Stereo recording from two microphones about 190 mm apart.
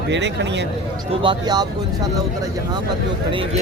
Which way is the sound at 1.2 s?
25° right (ahead or behind).